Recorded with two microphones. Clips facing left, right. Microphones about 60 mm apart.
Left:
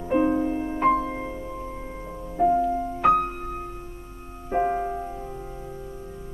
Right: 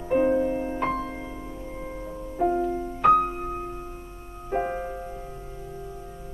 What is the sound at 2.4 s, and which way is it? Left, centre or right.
Music, centre.